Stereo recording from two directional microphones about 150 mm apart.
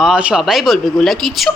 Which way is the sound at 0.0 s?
5° right (ahead or behind).